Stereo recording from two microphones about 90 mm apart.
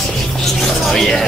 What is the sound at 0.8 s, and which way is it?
Speech, 5° left (ahead or behind).